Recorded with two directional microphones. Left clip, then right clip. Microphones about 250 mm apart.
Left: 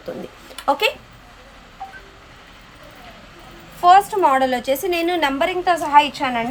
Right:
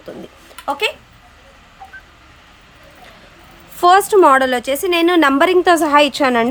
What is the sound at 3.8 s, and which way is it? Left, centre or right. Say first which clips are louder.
A woman's voice: right 3 dB; right.